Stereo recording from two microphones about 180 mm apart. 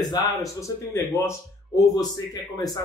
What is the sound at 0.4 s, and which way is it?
A man's voice, 15° left (ahead or behind).